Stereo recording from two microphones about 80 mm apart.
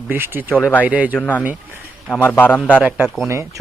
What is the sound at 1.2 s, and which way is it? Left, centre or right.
Speech, centre.